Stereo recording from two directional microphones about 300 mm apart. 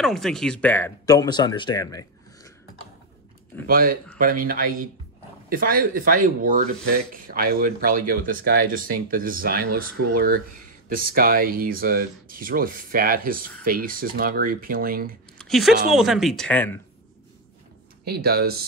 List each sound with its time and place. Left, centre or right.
0.0 s speech: centre
3.6 s speech: right
15.3 s a sound: centre
15.9 s speech: centre
18.0 s speech: right